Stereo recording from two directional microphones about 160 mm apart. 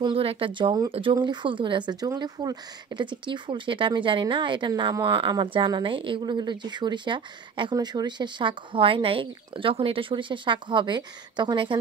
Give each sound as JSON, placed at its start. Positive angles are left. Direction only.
{"t": 0.0, "sound": "speech", "side_deg": -35}